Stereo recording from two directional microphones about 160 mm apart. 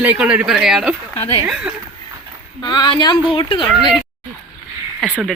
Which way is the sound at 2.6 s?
25° left (ahead or behind).